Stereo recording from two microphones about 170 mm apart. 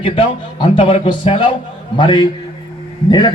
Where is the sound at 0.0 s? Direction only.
30° left (ahead or behind).